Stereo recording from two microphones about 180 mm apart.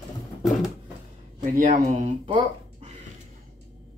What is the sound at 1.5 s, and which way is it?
Speech, 50° right (ahead or behind).